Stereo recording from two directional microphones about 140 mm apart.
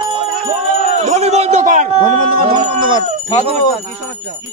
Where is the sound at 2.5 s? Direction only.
35° right (ahead or behind).